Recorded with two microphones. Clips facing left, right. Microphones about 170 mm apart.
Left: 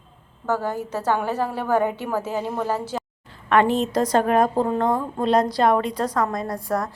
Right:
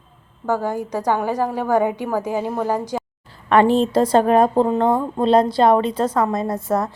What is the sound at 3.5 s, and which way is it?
A woman's voice, 30° right (ahead or behind).